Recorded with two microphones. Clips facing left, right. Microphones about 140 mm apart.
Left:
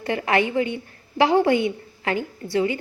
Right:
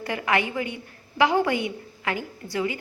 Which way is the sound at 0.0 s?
30° left (ahead or behind).